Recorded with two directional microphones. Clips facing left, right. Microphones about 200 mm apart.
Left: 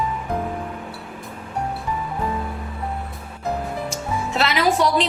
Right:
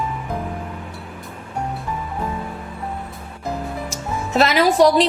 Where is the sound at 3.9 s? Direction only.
40° right (ahead or behind).